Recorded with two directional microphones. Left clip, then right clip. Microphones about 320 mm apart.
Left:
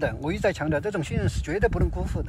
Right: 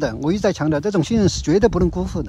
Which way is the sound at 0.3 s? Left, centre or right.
Centre.